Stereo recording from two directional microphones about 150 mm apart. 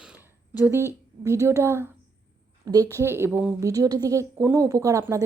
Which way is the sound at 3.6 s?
25° right (ahead or behind).